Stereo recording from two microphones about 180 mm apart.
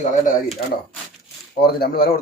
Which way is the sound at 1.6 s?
60° left (ahead or behind).